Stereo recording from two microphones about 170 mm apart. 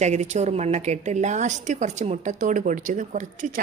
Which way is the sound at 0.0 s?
40° right (ahead or behind).